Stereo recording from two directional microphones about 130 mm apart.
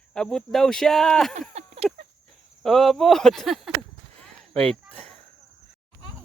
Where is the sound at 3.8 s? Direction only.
5° left (ahead or behind).